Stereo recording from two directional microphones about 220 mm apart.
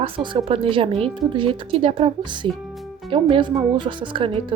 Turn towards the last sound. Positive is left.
turn(degrees=-20)  # may be behind; listen again after turning